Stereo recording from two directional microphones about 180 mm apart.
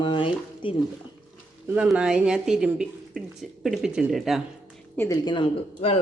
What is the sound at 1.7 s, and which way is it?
Speech, 5° right (ahead or behind).